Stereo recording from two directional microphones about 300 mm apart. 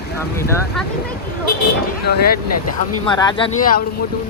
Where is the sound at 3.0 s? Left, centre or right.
Centre.